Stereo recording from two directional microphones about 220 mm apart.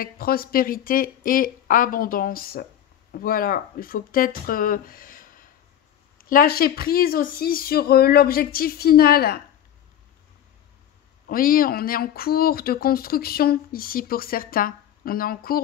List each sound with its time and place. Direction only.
0.0 s speech: 45° left (ahead or behind)
11.2 s speech: 40° left (ahead or behind)